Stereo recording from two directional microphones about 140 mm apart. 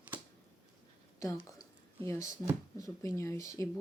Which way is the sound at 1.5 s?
20° left (ahead or behind).